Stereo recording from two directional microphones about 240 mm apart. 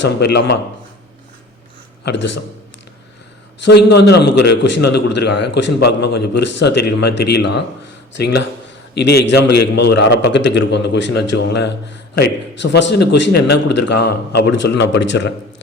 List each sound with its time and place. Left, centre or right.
0.0 s a man's voice: left
2.0 s a man's voice: left
3.6 s a man's voice: left